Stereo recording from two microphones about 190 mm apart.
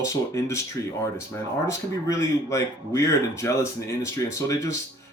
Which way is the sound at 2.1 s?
15° left (ahead or behind).